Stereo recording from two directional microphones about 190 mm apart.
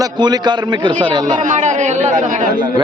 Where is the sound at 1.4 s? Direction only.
40° right (ahead or behind).